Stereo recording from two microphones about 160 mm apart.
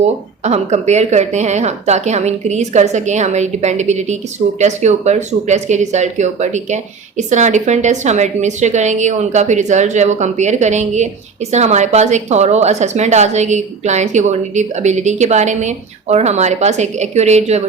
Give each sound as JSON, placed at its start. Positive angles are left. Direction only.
{"t": 0.4, "sound": "a woman's voice", "side_deg": -45}